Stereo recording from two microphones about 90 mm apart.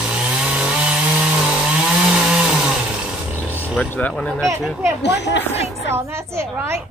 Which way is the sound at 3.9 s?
15° left (ahead or behind).